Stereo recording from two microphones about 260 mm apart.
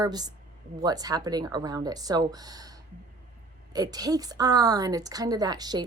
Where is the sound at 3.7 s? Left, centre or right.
Centre.